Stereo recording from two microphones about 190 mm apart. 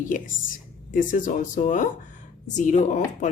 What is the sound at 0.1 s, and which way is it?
Speech, 45° left (ahead or behind).